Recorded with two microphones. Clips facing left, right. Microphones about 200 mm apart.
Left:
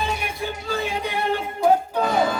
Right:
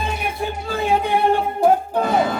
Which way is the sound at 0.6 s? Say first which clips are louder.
Right 7 dB; 50° right (ahead or behind).